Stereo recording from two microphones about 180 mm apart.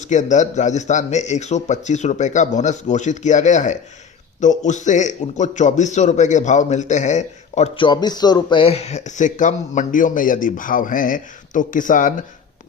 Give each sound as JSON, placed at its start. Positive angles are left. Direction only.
{"t": 0.0, "sound": "speech", "side_deg": 40}
{"t": 7.9, "sound": "speech", "side_deg": 20}